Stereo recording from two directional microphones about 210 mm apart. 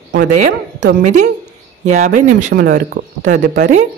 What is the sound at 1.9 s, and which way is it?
Speech, 35° right (ahead or behind).